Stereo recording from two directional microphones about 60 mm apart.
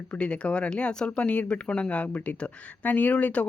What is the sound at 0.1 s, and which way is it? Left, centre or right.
Speech, centre.